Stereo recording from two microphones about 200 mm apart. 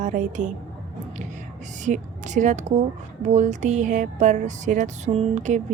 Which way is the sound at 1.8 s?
40° right (ahead or behind).